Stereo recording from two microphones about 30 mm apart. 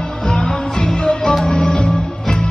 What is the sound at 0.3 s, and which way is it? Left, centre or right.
Music, left.